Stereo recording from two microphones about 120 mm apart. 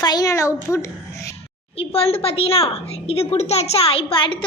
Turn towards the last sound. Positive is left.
turn(degrees=45)  # may be behind; listen again after turning